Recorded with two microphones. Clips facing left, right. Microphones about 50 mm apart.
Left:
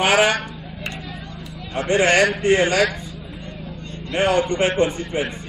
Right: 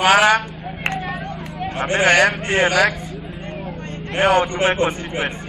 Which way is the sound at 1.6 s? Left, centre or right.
Right.